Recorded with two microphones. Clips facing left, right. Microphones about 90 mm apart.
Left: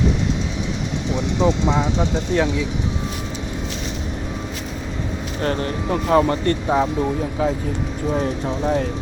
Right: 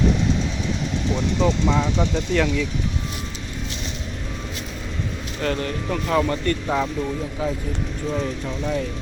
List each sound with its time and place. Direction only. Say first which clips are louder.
1.1 s speech: left 3 dB; 15° left (ahead or behind)
5.4 s speech: left 2 dB; 35° left (ahead or behind)
8.1 s speech: left 5 dB; 35° left (ahead or behind)